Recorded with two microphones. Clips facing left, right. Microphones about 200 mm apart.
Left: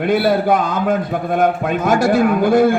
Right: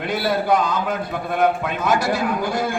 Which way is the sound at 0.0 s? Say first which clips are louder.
Left 7 dB; 55° left (ahead or behind).